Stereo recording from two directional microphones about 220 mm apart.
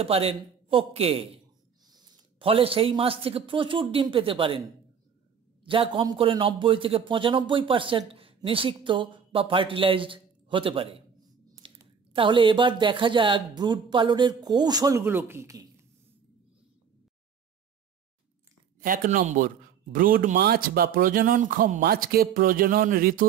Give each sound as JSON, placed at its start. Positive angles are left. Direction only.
{"t": 0.0, "sound": "a man's voice", "side_deg": -25}
{"t": 18.8, "sound": "a man's voice", "side_deg": -40}